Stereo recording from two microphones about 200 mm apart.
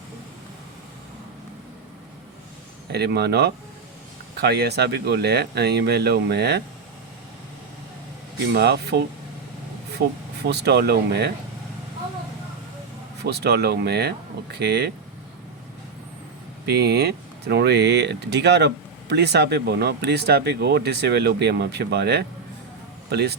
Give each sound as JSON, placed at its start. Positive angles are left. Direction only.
{"t": 2.9, "sound": "speech", "side_deg": -55}
{"t": 8.5, "sound": "speech", "side_deg": -55}
{"t": 10.4, "sound": "speech", "side_deg": -55}
{"t": 13.2, "sound": "speech", "side_deg": -55}
{"t": 16.6, "sound": "speech", "side_deg": -55}